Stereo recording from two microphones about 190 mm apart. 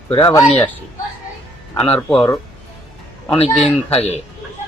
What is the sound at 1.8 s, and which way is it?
Speech, 30° left (ahead or behind).